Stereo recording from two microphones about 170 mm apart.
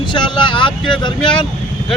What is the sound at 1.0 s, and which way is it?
Speech, 25° left (ahead or behind).